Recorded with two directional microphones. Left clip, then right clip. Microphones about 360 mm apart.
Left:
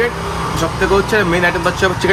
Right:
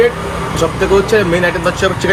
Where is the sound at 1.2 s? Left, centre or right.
Left.